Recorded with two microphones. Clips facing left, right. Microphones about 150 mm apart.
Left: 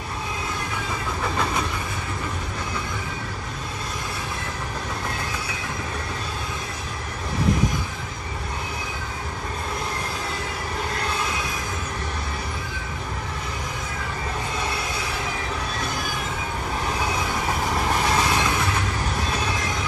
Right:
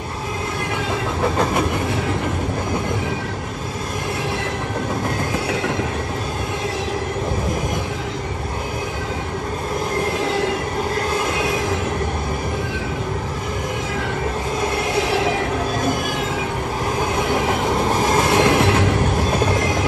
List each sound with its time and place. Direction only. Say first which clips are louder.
1.3 s vehicle: right 5 dB; 50° right (ahead or behind)
11.3 s train: right 9 dB; 70° right (ahead or behind)
15.0 s train: right 11 dB; 80° right
17.8 s train: right 5 dB; 30° right (ahead or behind)
18.1 s train: right 6 dB; 50° right (ahead or behind)
18.5 s train: right 9 dB; 80° right